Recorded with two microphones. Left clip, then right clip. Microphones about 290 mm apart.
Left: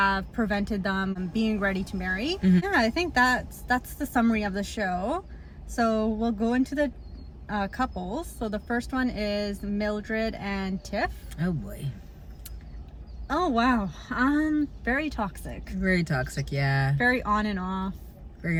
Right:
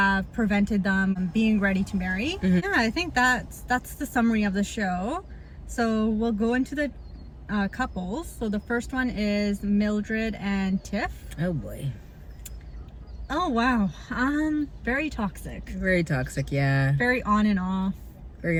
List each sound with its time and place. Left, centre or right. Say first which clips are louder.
0.0 s speech: right 1 dB; centre
11.3 s speech: right 5 dB; centre
13.2 s speech: even; centre
15.8 s speech: right 2 dB; centre
17.0 s speech: even; centre